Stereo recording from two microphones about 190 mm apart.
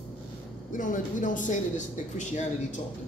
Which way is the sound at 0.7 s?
45° left (ahead or behind).